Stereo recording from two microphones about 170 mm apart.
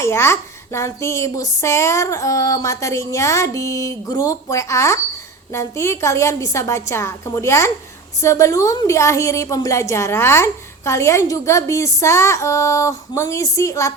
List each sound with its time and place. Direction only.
0.0 s a woman's voice: 15° left (ahead or behind)